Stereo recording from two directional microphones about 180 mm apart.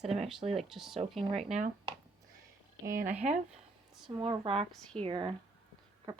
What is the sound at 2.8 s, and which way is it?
Speech, 50° right (ahead or behind).